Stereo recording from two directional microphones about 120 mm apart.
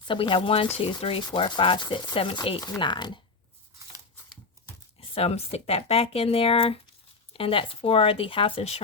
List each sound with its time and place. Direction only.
0.1 s speech: 45° left (ahead or behind)
4.9 s speech: 55° left (ahead or behind)